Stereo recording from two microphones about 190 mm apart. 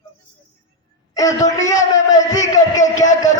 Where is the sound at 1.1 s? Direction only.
20° left (ahead or behind).